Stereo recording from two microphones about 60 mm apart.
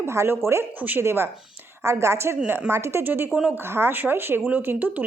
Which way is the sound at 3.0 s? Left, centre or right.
Right.